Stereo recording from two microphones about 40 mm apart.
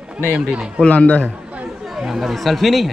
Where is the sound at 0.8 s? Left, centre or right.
Left.